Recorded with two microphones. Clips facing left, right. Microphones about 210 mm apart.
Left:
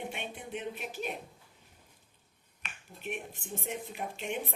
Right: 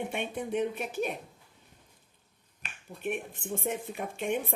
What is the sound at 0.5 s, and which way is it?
Speech, 50° right (ahead or behind).